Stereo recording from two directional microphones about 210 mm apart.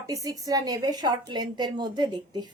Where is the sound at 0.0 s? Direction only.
15° right (ahead or behind).